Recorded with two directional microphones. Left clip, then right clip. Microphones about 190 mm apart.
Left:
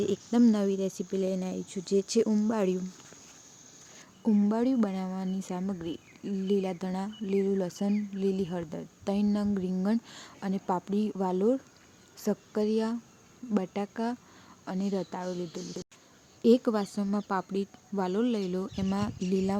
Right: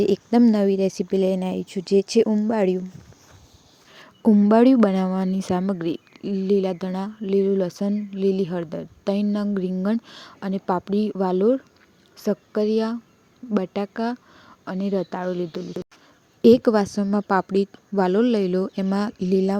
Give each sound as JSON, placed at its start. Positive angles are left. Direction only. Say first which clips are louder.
{"t": 0.0, "sound": "speech", "louder": "right 8 dB", "side_deg": -30}
{"t": 4.4, "sound": "a woman's voice", "louder": "right 16 dB", "side_deg": -40}